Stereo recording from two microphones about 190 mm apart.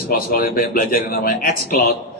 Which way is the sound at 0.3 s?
50° left (ahead or behind).